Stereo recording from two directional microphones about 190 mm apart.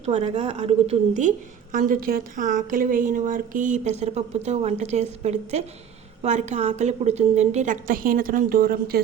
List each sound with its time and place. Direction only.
0.0 s a woman's voice: 35° right (ahead or behind)
1.7 s a woman's voice: 45° right (ahead or behind)